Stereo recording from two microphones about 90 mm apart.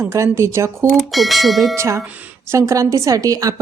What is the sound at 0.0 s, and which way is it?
Speech, 35° right (ahead or behind).